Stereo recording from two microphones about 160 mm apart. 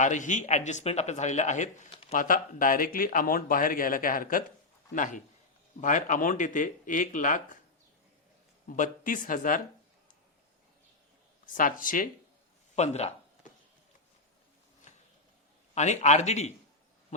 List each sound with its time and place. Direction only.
0.0 s speech: 50° left (ahead or behind)
1.9 s a sound: 35° left (ahead or behind)
2.1 s speech: 60° left (ahead or behind)
8.7 s speech: 55° left (ahead or behind)
11.4 s speech: 55° left (ahead or behind)
12.7 s speech: 45° left (ahead or behind)
15.7 s speech: 45° left (ahead or behind)